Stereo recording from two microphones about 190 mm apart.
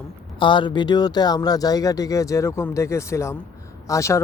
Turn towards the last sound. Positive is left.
turn(degrees=15)  # may be behind; listen again after turning